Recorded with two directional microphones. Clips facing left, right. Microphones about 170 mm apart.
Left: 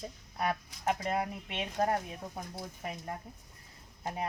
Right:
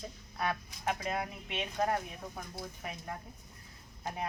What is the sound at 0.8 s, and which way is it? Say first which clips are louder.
Speech: left 3 dB; 35° left (ahead or behind).